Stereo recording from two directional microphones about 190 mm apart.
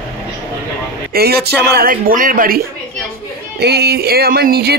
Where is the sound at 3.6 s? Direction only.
60° right (ahead or behind).